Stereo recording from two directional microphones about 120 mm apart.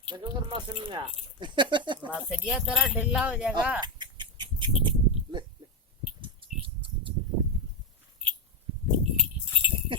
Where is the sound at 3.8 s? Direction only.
40° right (ahead or behind).